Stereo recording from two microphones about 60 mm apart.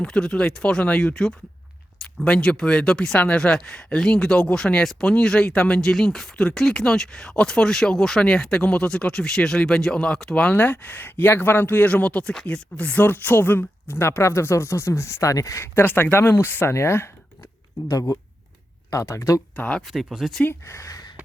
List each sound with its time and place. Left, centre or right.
0.0 s speech: centre
10.5 s speech: left
15.6 s speech: left
18.9 s speech: left
19.5 s speech: centre
19.9 s speech: centre
20.7 s speech: left